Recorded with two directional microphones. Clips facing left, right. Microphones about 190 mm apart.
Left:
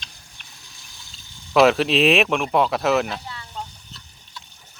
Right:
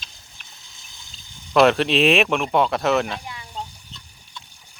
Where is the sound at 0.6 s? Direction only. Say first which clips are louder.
Left 1 dB; 20° right (ahead or behind).